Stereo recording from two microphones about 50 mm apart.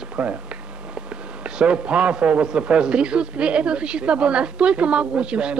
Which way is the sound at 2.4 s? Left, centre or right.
Right.